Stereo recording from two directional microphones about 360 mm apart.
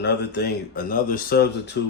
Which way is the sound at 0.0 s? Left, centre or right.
Left.